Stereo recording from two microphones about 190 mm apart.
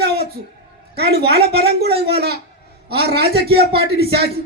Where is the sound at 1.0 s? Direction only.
55° right (ahead or behind).